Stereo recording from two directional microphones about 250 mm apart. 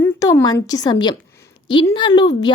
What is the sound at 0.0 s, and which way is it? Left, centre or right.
A woman's voice, centre.